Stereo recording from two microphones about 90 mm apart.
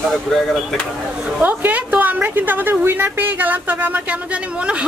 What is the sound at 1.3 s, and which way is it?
A woman's voice, 15° right (ahead or behind).